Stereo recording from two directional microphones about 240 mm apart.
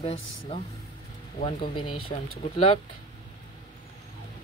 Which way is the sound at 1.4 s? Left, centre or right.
Left.